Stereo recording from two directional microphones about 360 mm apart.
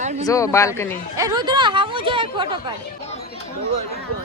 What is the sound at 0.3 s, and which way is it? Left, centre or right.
Speech, centre.